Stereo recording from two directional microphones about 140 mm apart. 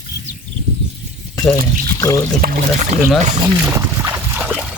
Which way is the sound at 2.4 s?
90° right.